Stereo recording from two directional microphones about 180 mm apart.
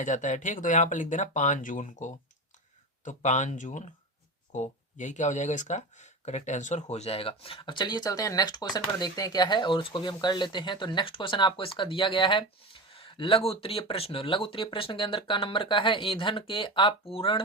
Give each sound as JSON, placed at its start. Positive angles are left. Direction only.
{"t": 0.0, "sound": "speech", "side_deg": 45}